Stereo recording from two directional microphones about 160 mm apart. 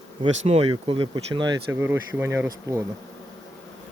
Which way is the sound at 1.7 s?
15° right (ahead or behind).